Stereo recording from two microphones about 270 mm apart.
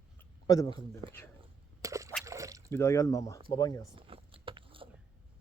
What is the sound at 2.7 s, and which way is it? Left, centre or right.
Speech, centre.